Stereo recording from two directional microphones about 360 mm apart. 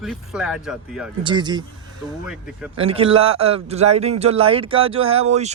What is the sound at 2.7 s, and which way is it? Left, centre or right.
Speech, centre.